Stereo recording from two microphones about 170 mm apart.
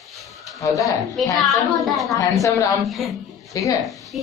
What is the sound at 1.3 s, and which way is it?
Speech, centre (ahead or behind).